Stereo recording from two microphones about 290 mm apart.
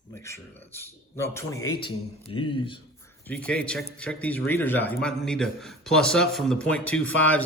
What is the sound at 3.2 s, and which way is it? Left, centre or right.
A man's voice, centre.